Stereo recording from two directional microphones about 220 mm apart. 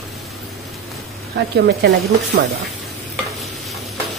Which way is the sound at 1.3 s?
50° right (ahead or behind).